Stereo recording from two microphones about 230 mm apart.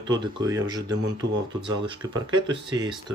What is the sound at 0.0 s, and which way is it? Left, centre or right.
Speech, centre.